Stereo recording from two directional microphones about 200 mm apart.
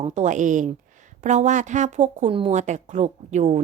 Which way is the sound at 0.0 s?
35° right (ahead or behind).